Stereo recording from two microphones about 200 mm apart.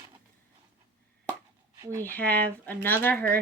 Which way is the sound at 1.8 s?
15° right (ahead or behind).